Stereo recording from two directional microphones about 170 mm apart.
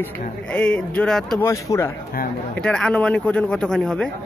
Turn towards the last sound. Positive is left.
turn(degrees=5)  # may be behind; listen again after turning